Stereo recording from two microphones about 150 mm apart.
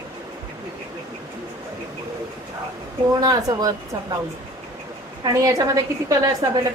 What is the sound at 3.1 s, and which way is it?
Speech, 25° right (ahead or behind).